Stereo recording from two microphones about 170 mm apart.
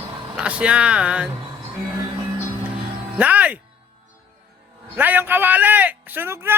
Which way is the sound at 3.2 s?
10° right (ahead or behind).